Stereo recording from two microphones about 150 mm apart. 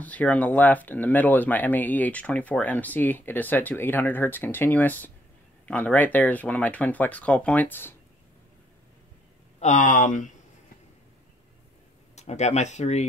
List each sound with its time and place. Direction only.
0.0 s speech: 10° left (ahead or behind)
9.6 s speech: 55° left (ahead or behind)
12.2 s speech: 50° left (ahead or behind)